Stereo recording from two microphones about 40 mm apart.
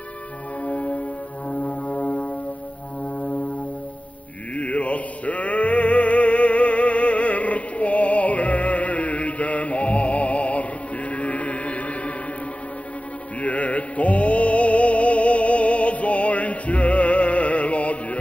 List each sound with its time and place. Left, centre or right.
0.6 s brass instrument: left
4.6 s male singing: left
13.4 s music: left